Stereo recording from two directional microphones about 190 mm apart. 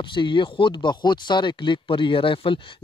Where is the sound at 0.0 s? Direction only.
25° left (ahead or behind).